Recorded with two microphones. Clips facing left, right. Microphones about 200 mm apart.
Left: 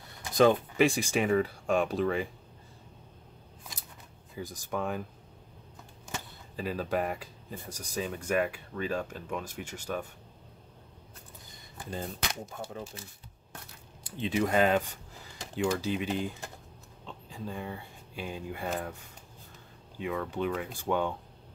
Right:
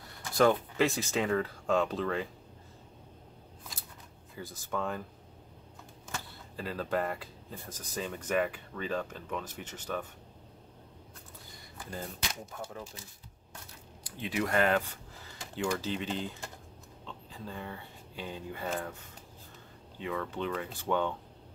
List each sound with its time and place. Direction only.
0.2 s speech: 20° left (ahead or behind)
4.4 s speech: 15° left (ahead or behind)
6.1 s speech: 15° left (ahead or behind)
12.5 s speech: 25° left (ahead or behind)
14.0 s speech: 25° left (ahead or behind); by 18.9 s 10° left (ahead or behind)
20.0 s speech: 15° left (ahead or behind)